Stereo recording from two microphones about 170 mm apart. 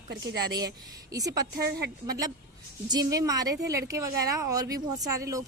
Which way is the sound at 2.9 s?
20° right (ahead or behind).